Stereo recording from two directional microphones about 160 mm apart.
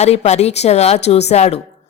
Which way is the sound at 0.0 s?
45° left (ahead or behind).